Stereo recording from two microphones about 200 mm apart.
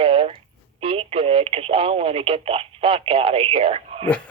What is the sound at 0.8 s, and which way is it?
Speech, 25° right (ahead or behind).